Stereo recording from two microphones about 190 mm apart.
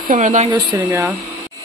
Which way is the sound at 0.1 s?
40° right (ahead or behind).